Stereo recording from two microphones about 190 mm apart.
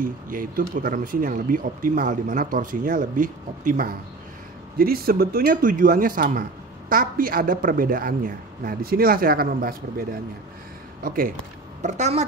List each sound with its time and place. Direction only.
0.0 s speech: 45° right (ahead or behind)
11.1 s speech: 50° right (ahead or behind)
11.8 s a woman's voice: 40° right (ahead or behind)